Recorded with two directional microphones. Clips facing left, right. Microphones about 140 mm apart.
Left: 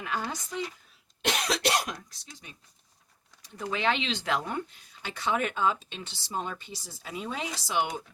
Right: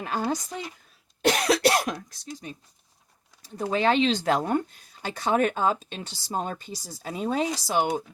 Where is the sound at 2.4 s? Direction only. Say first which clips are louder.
Right 10 dB; 40° right (ahead or behind).